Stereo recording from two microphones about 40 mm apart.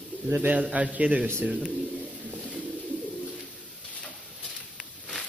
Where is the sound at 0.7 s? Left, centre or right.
Right.